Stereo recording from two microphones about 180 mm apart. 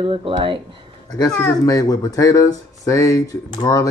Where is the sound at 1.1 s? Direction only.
20° left (ahead or behind).